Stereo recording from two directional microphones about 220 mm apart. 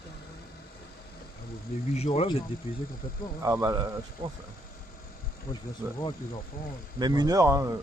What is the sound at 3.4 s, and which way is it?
Speech, 15° right (ahead or behind).